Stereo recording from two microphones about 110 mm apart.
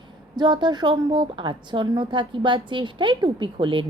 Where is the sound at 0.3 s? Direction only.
40° right (ahead or behind).